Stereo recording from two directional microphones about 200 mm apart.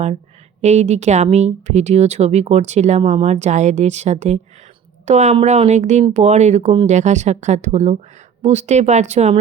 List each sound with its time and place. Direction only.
0.6 s speech: 35° right (ahead or behind)